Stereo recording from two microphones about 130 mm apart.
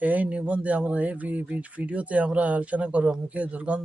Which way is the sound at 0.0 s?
10° right (ahead or behind).